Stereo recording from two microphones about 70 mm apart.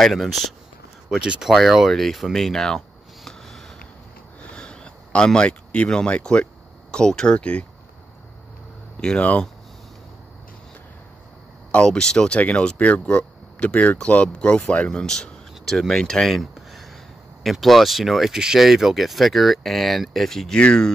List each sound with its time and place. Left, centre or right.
0.0 s speech: centre
1.1 s speech: centre
3.3 s a sound: centre
9.0 s speech: centre
11.7 s speech: centre